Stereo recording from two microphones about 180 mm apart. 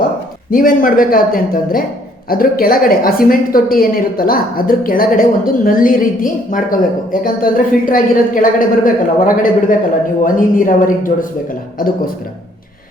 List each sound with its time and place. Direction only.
0.5 s a woman's voice: 50° left (ahead or behind)